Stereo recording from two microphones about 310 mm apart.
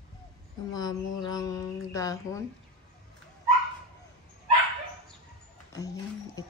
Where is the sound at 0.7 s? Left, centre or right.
Centre.